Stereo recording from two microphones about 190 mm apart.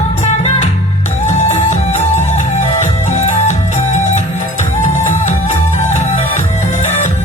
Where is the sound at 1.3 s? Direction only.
35° left (ahead or behind).